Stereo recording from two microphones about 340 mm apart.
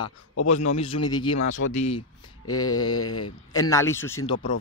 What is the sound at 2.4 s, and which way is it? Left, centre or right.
Mantra, left.